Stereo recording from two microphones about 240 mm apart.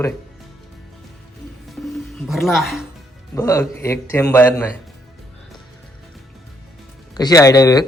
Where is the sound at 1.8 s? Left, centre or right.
Centre.